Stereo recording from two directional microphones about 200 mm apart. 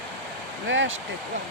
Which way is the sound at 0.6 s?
65° right (ahead or behind).